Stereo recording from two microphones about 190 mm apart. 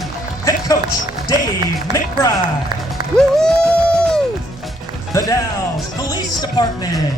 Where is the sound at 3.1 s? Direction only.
5° left (ahead or behind).